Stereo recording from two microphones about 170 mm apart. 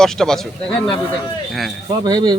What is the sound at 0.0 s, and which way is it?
Speech, 5° left (ahead or behind).